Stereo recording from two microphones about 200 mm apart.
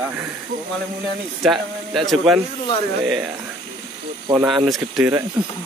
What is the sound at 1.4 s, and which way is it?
Speech, centre (ahead or behind).